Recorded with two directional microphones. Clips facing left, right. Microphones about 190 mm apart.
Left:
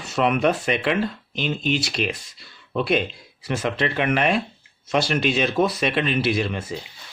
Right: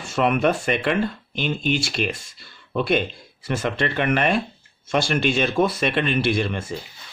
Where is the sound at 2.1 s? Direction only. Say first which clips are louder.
Even; 45° right (ahead or behind).